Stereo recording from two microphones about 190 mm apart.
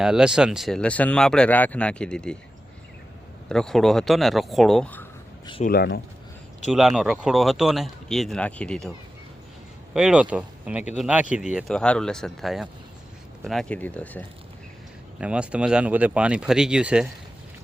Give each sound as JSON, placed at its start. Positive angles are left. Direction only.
{"t": 0.0, "sound": "speech", "side_deg": -5}
{"t": 3.5, "sound": "speech", "side_deg": 0}
{"t": 5.6, "sound": "speech", "side_deg": 55}
{"t": 6.7, "sound": "speech", "side_deg": 0}
{"t": 9.9, "sound": "speech", "side_deg": -5}
{"t": 15.2, "sound": "speech", "side_deg": -5}